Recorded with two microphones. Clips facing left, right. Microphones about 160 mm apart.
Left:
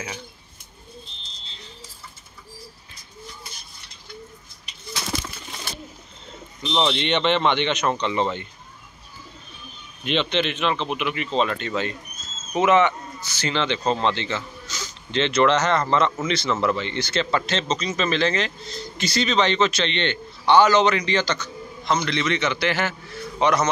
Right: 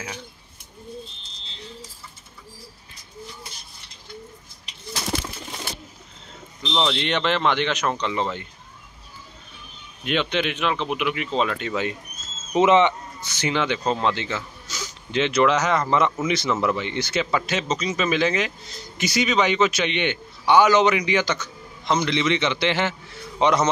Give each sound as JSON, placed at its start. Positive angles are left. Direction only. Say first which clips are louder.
{"t": 6.7, "sound": "speech", "louder": "left 1 dB", "side_deg": 5}
{"t": 10.0, "sound": "a man's voice", "louder": "left 1 dB", "side_deg": -5}